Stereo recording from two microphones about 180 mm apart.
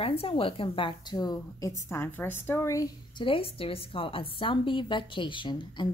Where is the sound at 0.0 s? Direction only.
30° left (ahead or behind).